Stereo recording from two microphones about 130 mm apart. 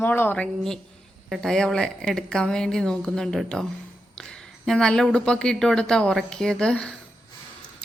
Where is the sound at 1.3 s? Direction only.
5° left (ahead or behind).